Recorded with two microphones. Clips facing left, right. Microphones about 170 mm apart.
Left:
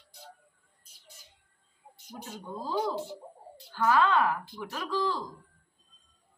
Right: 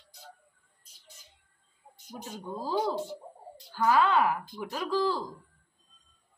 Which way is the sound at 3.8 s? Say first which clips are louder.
Right 1 dB; 10° right (ahead or behind).